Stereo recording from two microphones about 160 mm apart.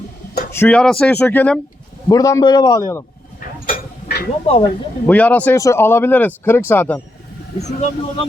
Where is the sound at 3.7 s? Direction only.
70° left (ahead or behind).